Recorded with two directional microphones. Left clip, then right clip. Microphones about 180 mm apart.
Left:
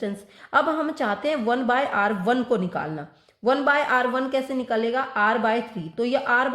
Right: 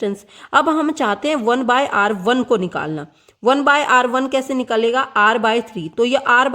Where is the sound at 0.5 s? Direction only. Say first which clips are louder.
Right 6 dB; 40° right (ahead or behind).